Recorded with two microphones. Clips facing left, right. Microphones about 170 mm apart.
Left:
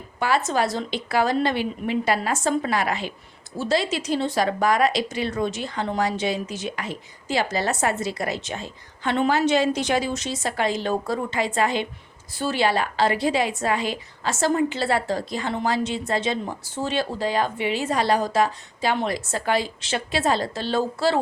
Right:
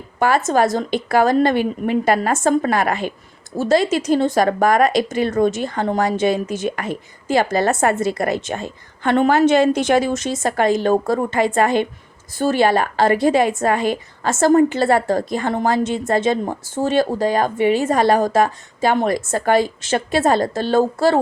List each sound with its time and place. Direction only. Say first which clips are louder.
0.2 s a woman's voice: right 6 dB; 50° right (ahead or behind)